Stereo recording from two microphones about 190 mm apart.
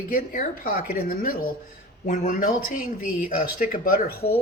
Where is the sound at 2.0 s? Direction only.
45° left (ahead or behind).